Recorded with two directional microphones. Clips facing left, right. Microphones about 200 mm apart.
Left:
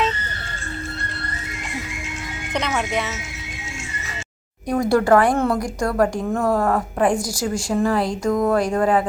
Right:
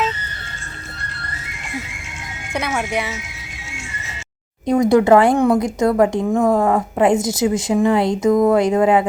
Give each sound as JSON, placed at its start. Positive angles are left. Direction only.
{"t": 2.5, "sound": "speech", "side_deg": -10}
{"t": 4.6, "sound": "a woman's voice", "side_deg": -20}